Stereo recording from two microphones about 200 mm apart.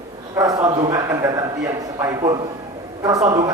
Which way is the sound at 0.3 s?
20° right (ahead or behind).